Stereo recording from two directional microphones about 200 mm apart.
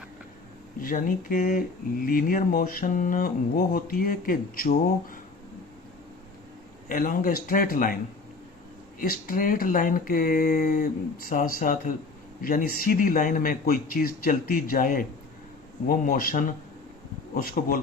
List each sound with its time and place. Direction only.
0.8 s speech: 45° left (ahead or behind)
6.8 s speech: 45° left (ahead or behind)
9.0 s speech: 45° left (ahead or behind)